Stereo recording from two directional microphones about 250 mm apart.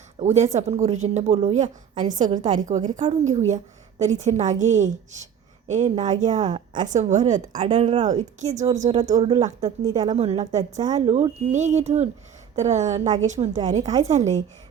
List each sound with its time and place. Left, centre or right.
0.2 s a woman's voice: right
9.0 s speech: centre
10.1 s a woman's voice: right
13.8 s speech: centre